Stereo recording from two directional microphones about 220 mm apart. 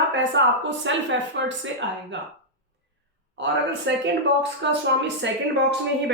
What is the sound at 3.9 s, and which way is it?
A woman's voice, 55° right (ahead or behind).